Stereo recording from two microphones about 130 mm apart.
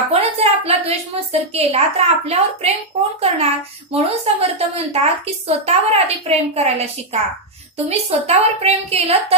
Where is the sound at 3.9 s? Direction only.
50° right (ahead or behind).